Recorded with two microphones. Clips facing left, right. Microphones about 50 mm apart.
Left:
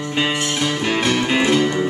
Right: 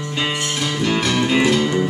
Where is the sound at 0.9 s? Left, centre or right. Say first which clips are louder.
Right 1 dB; left.